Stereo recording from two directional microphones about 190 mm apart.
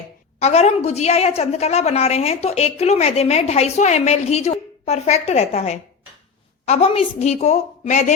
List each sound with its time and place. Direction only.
0.3 s a woman's voice: 35° left (ahead or behind)